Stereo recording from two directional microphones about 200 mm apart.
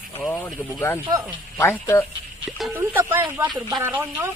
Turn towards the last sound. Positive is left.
turn(degrees=-10)  # may be behind; listen again after turning